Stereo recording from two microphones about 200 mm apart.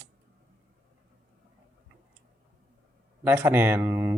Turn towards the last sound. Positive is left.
turn(degrees=-10)  # may be behind; listen again after turning